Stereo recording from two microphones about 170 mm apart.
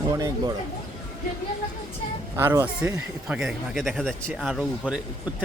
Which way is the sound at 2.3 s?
15° right (ahead or behind).